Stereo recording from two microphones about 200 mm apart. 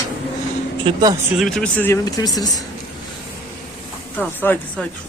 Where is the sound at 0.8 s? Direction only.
20° right (ahead or behind).